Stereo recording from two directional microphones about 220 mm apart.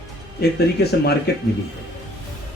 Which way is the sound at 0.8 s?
50° left (ahead or behind).